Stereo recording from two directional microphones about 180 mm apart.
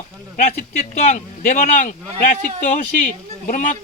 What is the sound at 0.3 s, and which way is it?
Speech, 40° left (ahead or behind).